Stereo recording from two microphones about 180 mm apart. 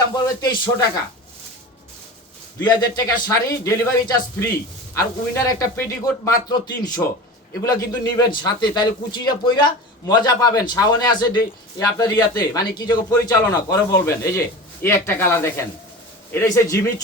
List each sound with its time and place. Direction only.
0.1 s a man's voice: 20° left (ahead or behind)
2.6 s a man's voice: 20° left (ahead or behind)